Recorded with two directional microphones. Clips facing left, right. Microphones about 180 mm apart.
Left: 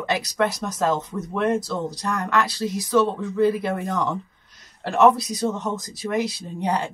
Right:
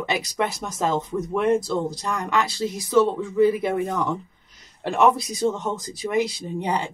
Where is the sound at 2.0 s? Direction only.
10° right (ahead or behind).